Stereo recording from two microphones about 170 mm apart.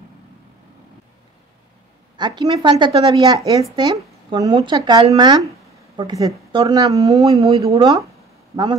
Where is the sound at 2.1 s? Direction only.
25° right (ahead or behind).